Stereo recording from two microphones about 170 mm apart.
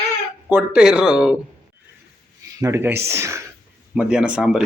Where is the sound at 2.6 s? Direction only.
15° right (ahead or behind).